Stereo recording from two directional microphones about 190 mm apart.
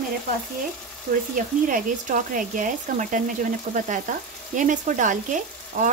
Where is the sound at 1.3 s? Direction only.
45° right (ahead or behind).